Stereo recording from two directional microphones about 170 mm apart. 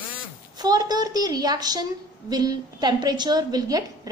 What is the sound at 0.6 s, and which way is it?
A woman's voice, 25° right (ahead or behind).